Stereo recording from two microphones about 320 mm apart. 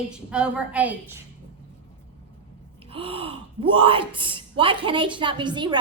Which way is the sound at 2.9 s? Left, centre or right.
Centre.